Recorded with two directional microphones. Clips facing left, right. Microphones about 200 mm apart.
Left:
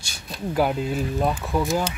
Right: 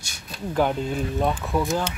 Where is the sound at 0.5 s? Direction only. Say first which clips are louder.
Even; 5° left (ahead or behind).